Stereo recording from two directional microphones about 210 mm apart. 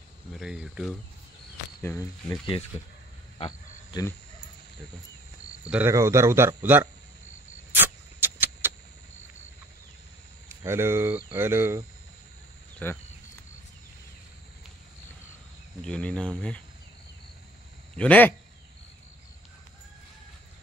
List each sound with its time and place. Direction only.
0.4 s speech: 5° right (ahead or behind)
1.8 s speech: 10° left (ahead or behind)
3.3 s a sound: 20° left (ahead or behind)
5.7 s speech: 10° right (ahead or behind)
7.7 s vehicle: 10° right (ahead or behind)
10.6 s speech: 10° right (ahead or behind)
12.8 s speech: 5° left (ahead or behind)
15.8 s speech: 5° left (ahead or behind)
17.9 s speech: 5° left (ahead or behind)